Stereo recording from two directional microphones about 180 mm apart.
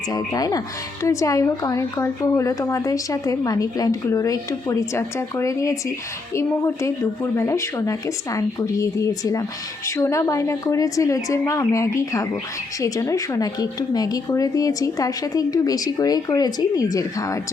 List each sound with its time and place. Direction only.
0.1 s speech: 20° left (ahead or behind)